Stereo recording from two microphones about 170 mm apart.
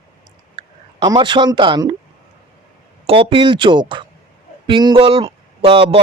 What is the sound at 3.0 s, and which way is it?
Speech, 35° right (ahead or behind).